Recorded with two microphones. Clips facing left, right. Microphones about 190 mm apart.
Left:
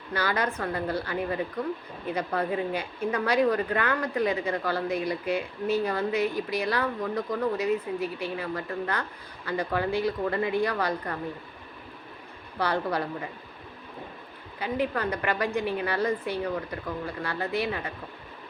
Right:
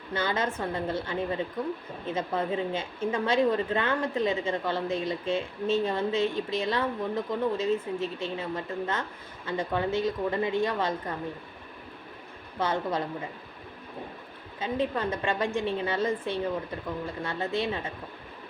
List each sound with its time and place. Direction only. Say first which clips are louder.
0.1 s a woman's voice: left 1 dB; 25° right (ahead or behind)
12.5 s a woman's voice: left 1 dB; 20° right (ahead or behind)
14.6 s a woman's voice: even; 20° right (ahead or behind)